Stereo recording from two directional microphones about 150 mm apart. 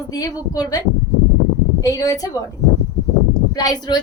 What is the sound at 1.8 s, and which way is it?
Speech, 25° left (ahead or behind).